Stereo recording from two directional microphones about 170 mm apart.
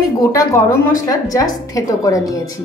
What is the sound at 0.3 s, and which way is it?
Speech, 20° left (ahead or behind).